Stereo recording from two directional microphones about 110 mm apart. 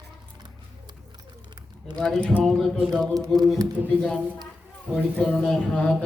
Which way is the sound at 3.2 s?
35° right (ahead or behind).